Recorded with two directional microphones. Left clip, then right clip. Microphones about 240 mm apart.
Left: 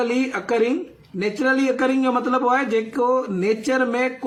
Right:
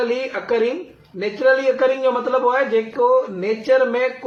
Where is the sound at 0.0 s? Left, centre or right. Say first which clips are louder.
Right 1 dB; left.